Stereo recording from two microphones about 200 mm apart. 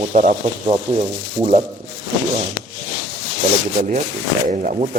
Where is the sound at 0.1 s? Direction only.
40° right (ahead or behind).